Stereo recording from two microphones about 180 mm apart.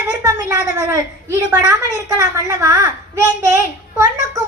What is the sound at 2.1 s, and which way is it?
A child's voice, 15° right (ahead or behind).